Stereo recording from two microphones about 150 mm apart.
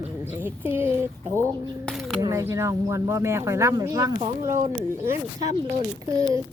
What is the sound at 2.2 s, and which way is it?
Speech, 20° right (ahead or behind).